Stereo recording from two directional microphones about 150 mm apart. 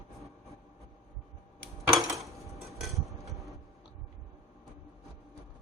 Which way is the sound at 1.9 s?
Centre (ahead or behind).